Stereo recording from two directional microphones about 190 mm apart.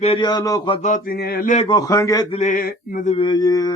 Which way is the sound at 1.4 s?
40° left (ahead or behind).